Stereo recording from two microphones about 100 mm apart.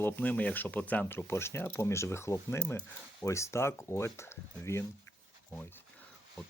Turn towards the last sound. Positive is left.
turn(degrees=25)  # may be behind; listen again after turning